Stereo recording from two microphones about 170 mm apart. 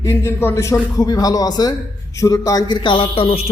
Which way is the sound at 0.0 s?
15° left (ahead or behind).